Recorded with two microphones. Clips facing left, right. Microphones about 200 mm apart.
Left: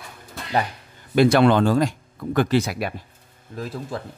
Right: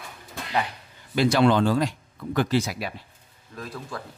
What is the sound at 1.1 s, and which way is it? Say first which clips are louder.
Speech: left 4 dB; 55° left (ahead or behind).